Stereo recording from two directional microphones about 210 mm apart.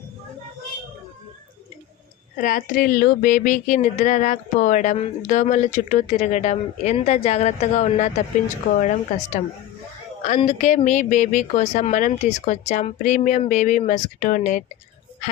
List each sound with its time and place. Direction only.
2.4 s speech: 40° left (ahead or behind)